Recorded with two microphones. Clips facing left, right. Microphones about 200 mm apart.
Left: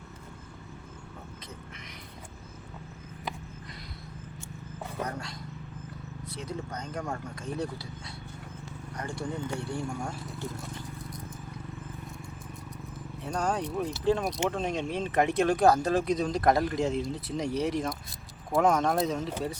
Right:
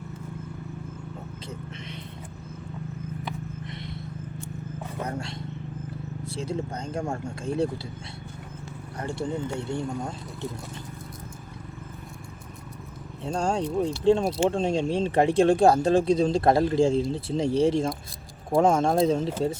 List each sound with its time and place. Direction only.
5.0 s roaring cats: 25° right (ahead or behind)
6.2 s speech: 30° right (ahead or behind)
9.0 s speech: 25° right (ahead or behind)
13.2 s speech: 25° right (ahead or behind)